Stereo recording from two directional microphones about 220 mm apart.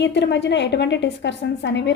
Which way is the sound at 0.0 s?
50° left (ahead or behind).